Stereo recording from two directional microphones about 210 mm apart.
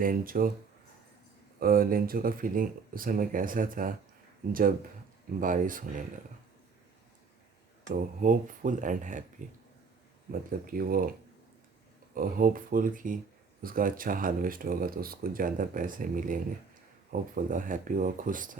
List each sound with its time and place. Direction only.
0.0 s speech: 40° right (ahead or behind)
1.5 s speech: 45° right (ahead or behind)
5.4 s speech: 40° right (ahead or behind)
8.2 s speech: 40° right (ahead or behind)
10.7 s speech: 45° right (ahead or behind)
12.1 s speech: 40° right (ahead or behind)